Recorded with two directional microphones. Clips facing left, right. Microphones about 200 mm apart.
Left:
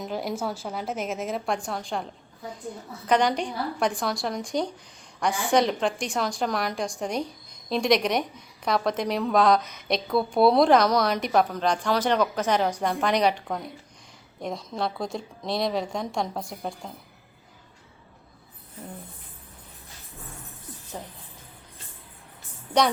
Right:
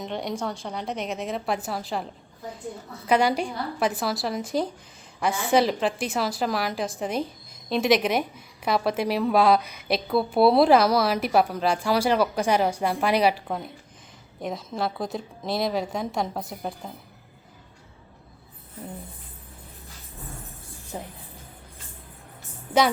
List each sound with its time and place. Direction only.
0.0 s a woman's voice: 5° left (ahead or behind)